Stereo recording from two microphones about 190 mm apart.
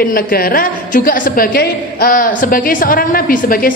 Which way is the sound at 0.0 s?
50° left (ahead or behind).